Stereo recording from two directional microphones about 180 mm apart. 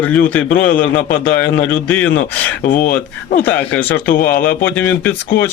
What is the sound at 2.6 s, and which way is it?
Speech, 50° left (ahead or behind).